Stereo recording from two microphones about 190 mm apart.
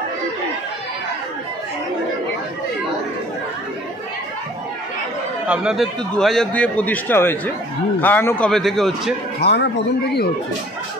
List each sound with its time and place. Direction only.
5.5 s a man's voice: 5° right (ahead or behind)
9.4 s a man's voice: 60° left (ahead or behind)